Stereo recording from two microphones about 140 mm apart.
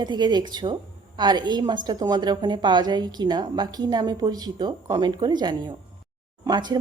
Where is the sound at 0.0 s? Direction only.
30° right (ahead or behind).